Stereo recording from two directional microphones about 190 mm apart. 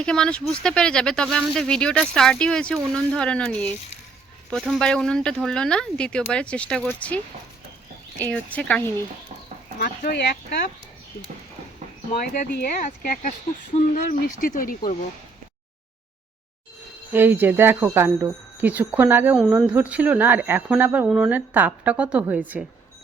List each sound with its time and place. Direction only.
0.0 s speech: 5° left (ahead or behind)
8.2 s speech: 5° left (ahead or behind)
9.7 s speech: 50° left (ahead or behind)
12.3 s speech: 40° left (ahead or behind)
17.1 s speech: 10° right (ahead or behind)